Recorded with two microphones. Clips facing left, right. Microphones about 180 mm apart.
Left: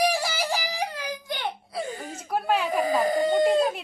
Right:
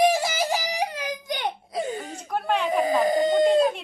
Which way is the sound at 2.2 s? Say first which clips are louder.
Even; 5° left (ahead or behind).